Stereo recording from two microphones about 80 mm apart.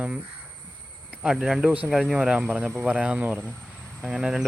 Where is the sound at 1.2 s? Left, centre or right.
Centre.